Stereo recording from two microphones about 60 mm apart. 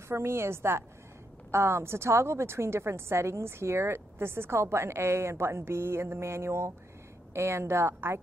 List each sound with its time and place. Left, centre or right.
0.1 s a woman's voice: right